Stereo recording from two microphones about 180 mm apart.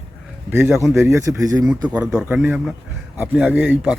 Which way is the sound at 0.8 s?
15° right (ahead or behind).